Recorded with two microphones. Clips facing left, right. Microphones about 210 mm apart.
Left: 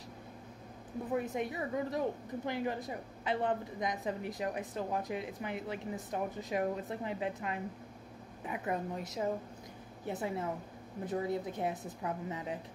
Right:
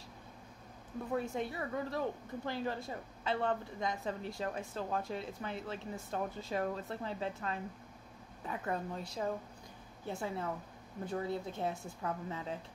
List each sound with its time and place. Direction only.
1.1 s speech: 15° left (ahead or behind)